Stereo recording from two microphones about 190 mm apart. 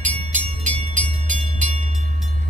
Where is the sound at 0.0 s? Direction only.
35° right (ahead or behind).